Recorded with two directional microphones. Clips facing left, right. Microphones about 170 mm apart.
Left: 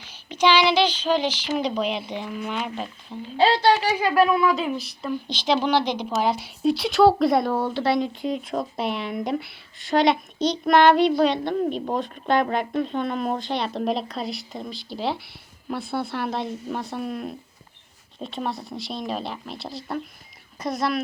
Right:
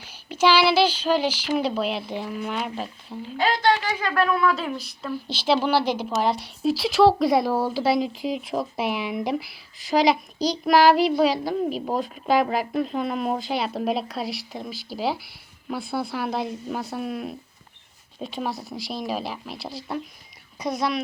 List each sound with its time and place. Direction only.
0.0 s speech: 10° right (ahead or behind)
3.7 s speech: 20° left (ahead or behind); by 21.0 s centre (ahead or behind)